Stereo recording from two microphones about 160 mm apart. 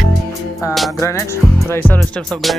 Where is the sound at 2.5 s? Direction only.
Centre (ahead or behind).